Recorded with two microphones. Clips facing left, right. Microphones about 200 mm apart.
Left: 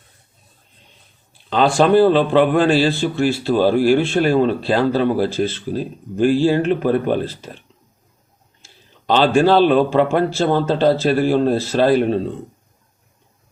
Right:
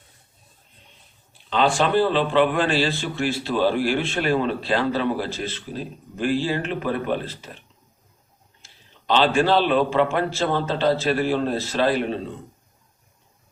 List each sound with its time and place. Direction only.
1.5 s a man's voice: 45° left (ahead or behind)
9.0 s a man's voice: 45° left (ahead or behind)